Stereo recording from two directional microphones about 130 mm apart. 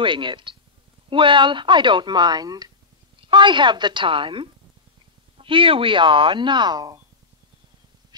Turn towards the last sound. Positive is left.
turn(degrees=-30)  # may be behind; listen again after turning